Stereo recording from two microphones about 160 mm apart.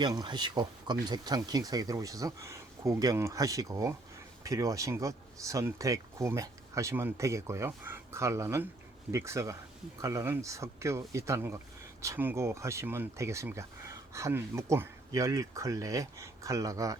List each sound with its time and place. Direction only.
0.0 s speech: 25° right (ahead or behind)